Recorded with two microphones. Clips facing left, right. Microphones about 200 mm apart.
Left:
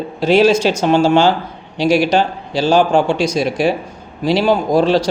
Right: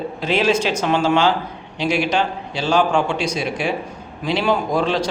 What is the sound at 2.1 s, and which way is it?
Speech, 35° left (ahead or behind).